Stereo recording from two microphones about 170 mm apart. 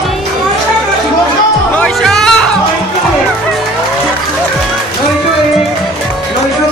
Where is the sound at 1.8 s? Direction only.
5° left (ahead or behind).